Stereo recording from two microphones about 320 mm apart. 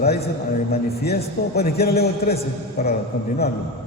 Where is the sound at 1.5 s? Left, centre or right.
Left.